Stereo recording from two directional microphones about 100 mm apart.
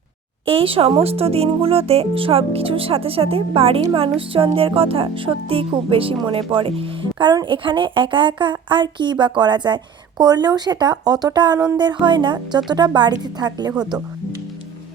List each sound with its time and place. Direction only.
0.4 s speech: 70° right (ahead or behind)
4.5 s music: 65° right (ahead or behind)
6.5 s a woman's voice: 65° right (ahead or behind); by 14.0 s 45° right (ahead or behind)